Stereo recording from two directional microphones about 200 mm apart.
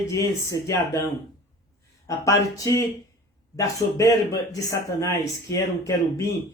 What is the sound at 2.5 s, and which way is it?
Speech, 15° left (ahead or behind).